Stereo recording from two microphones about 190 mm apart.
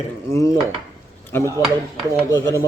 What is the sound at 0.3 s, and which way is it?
Speech, 15° left (ahead or behind).